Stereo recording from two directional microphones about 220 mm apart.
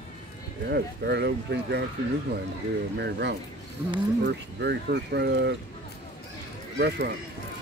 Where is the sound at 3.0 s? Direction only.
50° right (ahead or behind).